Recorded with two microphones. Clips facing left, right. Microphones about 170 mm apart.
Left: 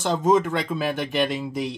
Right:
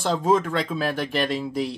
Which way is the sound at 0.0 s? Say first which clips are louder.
Left 1 dB; centre (ahead or behind).